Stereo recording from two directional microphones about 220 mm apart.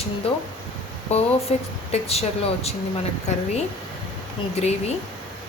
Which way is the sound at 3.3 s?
30° left (ahead or behind).